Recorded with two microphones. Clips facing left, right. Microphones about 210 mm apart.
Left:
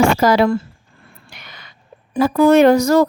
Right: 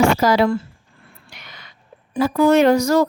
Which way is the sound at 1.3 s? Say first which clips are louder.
Left 1 dB; 55° left (ahead or behind).